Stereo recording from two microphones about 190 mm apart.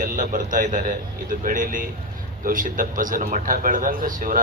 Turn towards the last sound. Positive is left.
turn(degrees=-45)  # may be behind; listen again after turning